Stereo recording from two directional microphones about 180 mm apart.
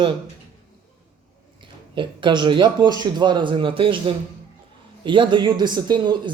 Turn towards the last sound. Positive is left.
turn(degrees=-25)  # may be behind; listen again after turning